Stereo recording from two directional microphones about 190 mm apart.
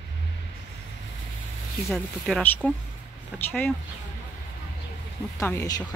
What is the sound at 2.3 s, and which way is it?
Speech, centre (ahead or behind).